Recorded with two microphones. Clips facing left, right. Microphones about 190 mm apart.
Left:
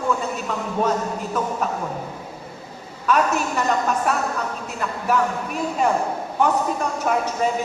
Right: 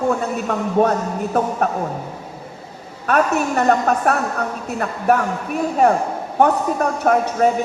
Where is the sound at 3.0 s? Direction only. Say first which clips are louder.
Right 3 dB; 60° right (ahead or behind).